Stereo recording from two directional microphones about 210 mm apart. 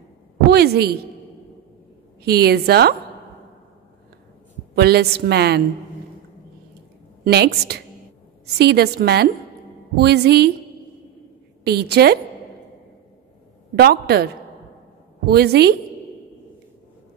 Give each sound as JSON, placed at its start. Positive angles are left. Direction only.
{"t": 0.5, "sound": "a woman's voice", "side_deg": -50}
{"t": 2.2, "sound": "a woman's voice", "side_deg": -50}
{"t": 4.7, "sound": "a woman's voice", "side_deg": -50}
{"t": 7.2, "sound": "a woman's voice", "side_deg": -50}
{"t": 11.6, "sound": "a woman's voice", "side_deg": -50}
{"t": 13.7, "sound": "a woman's voice", "side_deg": -50}